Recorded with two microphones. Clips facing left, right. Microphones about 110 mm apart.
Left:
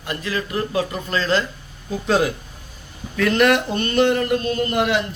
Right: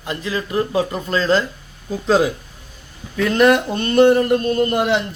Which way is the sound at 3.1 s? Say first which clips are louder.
Right 2 dB; 15° right (ahead or behind).